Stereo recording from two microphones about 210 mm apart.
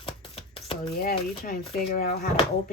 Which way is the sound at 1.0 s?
45° left (ahead or behind).